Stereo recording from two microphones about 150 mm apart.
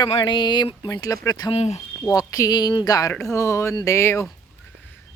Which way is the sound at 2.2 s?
20° left (ahead or behind).